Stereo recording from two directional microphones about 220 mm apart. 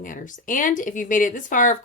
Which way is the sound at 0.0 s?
35° left (ahead or behind).